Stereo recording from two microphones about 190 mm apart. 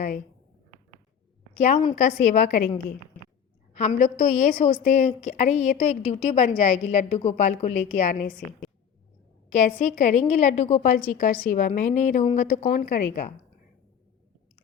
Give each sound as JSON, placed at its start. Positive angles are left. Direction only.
{"t": 1.5, "sound": "a woman's voice", "side_deg": 35}
{"t": 3.8, "sound": "a woman's voice", "side_deg": 40}
{"t": 9.5, "sound": "a woman's voice", "side_deg": 40}